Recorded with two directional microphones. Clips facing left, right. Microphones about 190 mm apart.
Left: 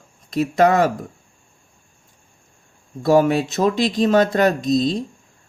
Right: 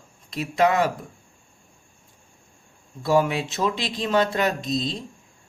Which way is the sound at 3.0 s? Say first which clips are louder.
Left 6 dB; 45° left (ahead or behind).